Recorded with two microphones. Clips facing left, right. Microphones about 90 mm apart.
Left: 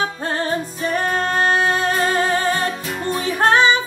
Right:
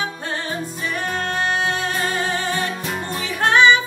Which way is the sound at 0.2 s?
40° left (ahead or behind).